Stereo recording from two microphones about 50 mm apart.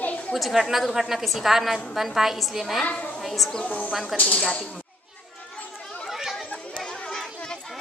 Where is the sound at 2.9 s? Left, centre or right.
Left.